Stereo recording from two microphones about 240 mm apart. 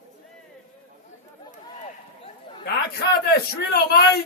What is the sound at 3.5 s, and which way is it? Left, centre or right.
Speech, left.